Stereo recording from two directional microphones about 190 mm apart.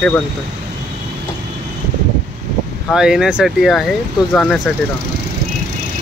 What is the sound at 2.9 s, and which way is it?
Speech, 5° right (ahead or behind).